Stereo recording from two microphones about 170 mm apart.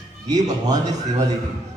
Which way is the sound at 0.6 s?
20° right (ahead or behind).